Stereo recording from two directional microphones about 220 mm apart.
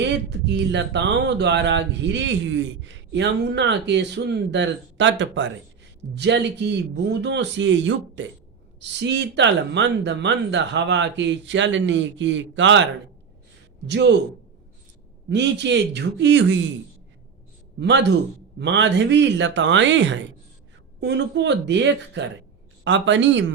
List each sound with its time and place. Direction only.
0.0 s speech: 50° right (ahead or behind)
15.3 s speech: 50° right (ahead or behind)
17.7 s a man's voice: 50° right (ahead or behind)